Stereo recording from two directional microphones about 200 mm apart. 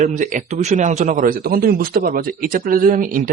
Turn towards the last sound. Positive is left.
turn(degrees=-40)  # may be behind; listen again after turning